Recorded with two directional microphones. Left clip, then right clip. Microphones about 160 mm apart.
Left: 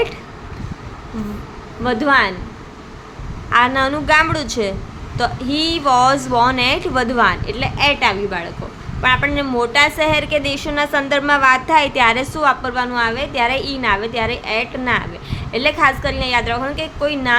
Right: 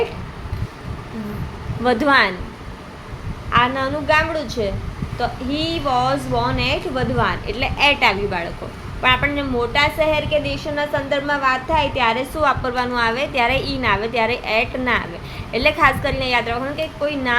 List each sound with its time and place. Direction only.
1.8 s a woman's voice: 5° left (ahead or behind)
3.5 s a woman's voice: 20° left (ahead or behind)
7.4 s a woman's voice: 15° left (ahead or behind)